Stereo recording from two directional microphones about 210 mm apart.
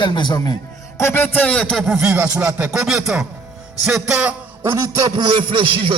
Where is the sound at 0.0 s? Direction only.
20° left (ahead or behind).